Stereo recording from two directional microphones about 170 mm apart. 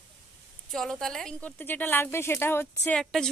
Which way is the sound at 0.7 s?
Centre (ahead or behind).